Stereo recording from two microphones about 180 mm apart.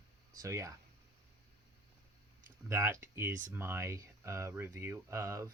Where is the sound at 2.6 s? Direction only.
15° right (ahead or behind).